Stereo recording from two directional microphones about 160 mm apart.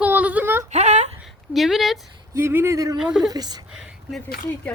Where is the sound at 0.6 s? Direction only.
45° right (ahead or behind).